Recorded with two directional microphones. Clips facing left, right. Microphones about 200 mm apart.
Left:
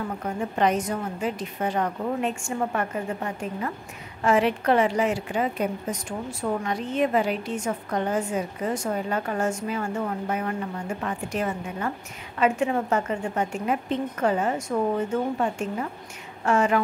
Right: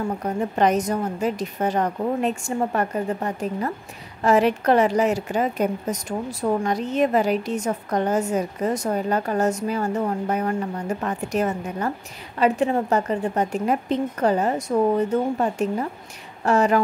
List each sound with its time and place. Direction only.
0.2 s a woman's voice: 40° right (ahead or behind)